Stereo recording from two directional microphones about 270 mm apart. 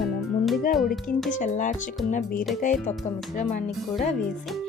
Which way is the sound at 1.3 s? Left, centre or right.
Left.